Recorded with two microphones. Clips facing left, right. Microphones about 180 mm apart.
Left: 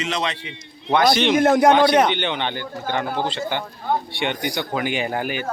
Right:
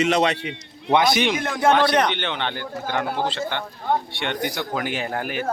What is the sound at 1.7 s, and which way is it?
Speech, 5° right (ahead or behind).